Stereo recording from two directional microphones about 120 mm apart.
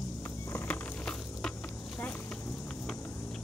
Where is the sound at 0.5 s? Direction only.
10° left (ahead or behind).